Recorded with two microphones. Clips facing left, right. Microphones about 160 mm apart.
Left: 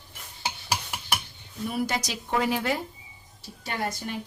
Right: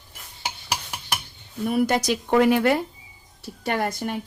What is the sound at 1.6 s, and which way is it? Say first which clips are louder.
A woman's voice: right 8 dB; 55° right (ahead or behind).